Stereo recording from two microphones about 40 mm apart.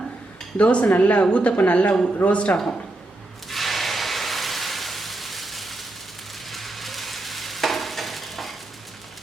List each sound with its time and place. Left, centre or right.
0.5 s a woman's voice: left
3.5 s a sound: centre
6.5 s frying: centre